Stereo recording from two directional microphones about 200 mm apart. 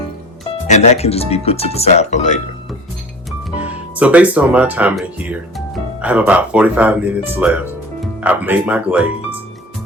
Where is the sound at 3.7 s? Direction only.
5° right (ahead or behind).